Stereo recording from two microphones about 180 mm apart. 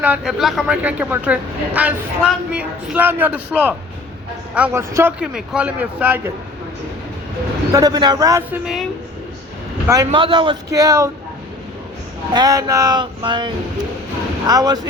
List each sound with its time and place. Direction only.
0.0 s a woman's voice: 5° right (ahead or behind)
5.2 s a woman's voice: 5° right (ahead or behind)
7.7 s a man's voice: 20° right (ahead or behind)
8.6 s a woman's voice: centre (ahead or behind)
9.8 s a man's voice: 20° right (ahead or behind)
12.3 s a man's voice: 20° right (ahead or behind)